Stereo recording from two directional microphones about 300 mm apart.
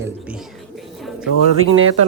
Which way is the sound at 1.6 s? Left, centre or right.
Right.